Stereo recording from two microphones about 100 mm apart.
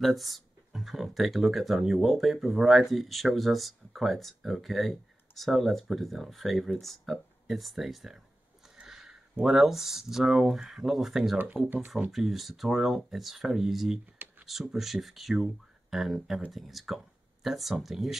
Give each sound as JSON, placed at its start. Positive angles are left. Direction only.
{"t": 0.0, "sound": "speech", "side_deg": 0}
{"t": 11.3, "sound": "speech", "side_deg": -15}
{"t": 12.1, "sound": "speech", "side_deg": 0}